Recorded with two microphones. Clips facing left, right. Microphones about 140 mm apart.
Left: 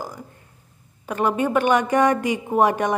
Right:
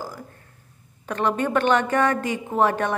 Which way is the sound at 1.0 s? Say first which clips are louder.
Left 2 dB; 10° left (ahead or behind).